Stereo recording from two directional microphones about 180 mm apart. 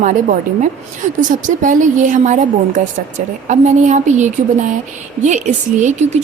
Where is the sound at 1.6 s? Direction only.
45° right (ahead or behind).